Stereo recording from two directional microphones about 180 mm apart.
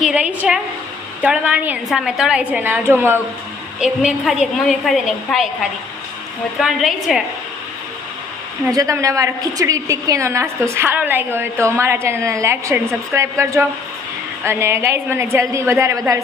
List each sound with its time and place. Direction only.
0.0 s a woman's voice: 5° right (ahead or behind)
6.6 s a woman's voice: centre (ahead or behind)
8.7 s a woman's voice: 20° right (ahead or behind)